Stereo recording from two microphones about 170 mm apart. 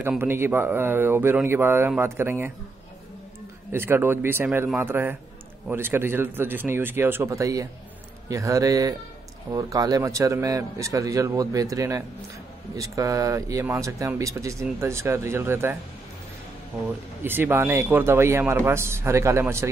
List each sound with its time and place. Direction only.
0.2 s speech: 15° right (ahead or behind)
3.7 s a man's voice: 15° right (ahead or behind)
17.2 s speech: 10° right (ahead or behind)